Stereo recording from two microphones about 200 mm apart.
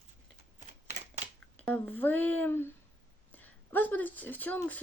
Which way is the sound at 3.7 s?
10° left (ahead or behind).